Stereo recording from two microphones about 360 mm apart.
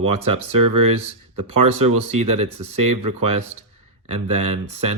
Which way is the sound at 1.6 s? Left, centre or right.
Centre.